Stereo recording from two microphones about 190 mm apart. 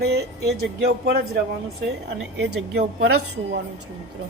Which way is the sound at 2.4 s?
60° right (ahead or behind).